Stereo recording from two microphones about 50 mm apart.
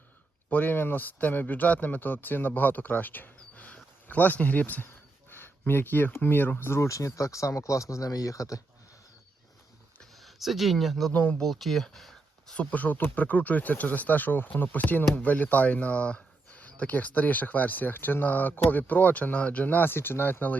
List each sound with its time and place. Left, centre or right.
0.5 s speech: left
6.7 s speech: left
10.2 s speech: centre
11.1 s speech: left
11.4 s speech: centre
12.5 s speech: left